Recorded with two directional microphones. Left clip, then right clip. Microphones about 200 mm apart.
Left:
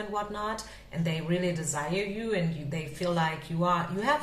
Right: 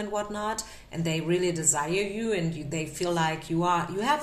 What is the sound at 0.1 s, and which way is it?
A woman's voice, 40° right (ahead or behind).